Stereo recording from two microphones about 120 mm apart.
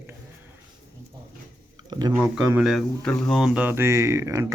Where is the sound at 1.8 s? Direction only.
35° right (ahead or behind).